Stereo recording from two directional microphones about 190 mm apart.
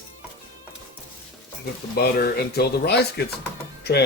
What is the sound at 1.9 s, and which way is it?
Speech, 55° left (ahead or behind).